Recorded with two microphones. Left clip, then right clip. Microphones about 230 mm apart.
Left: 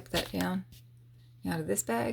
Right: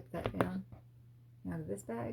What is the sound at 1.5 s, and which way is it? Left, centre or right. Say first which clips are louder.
Speech: left 10 dB; left.